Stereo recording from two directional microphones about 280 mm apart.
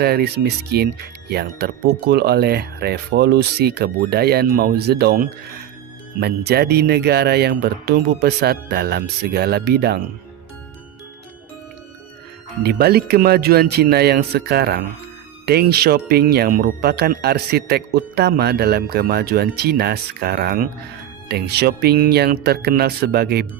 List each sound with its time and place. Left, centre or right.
0.0 s speech: right
12.6 s speech: right